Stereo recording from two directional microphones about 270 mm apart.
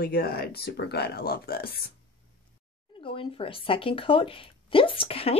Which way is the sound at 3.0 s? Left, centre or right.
Centre.